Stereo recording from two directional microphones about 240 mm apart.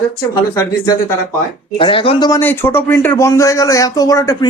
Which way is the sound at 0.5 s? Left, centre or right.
Centre.